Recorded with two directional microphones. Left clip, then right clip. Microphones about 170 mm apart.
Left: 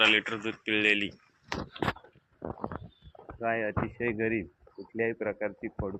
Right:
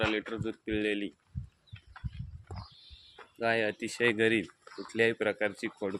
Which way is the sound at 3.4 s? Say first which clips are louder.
Right 1 dB; 55° right (ahead or behind).